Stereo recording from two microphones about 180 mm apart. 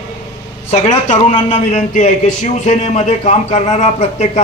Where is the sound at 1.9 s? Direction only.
45° left (ahead or behind).